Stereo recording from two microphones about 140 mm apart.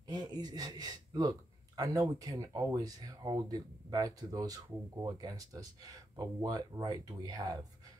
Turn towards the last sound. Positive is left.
turn(degrees=-25)  # may be behind; listen again after turning